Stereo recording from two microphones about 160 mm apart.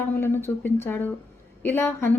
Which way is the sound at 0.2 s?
15° left (ahead or behind).